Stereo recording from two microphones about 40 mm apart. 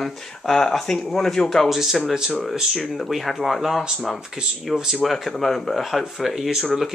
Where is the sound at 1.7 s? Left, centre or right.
Centre.